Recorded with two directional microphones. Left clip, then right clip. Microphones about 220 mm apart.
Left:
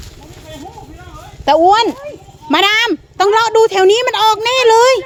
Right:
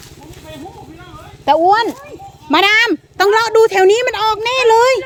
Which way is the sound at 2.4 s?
5° left (ahead or behind).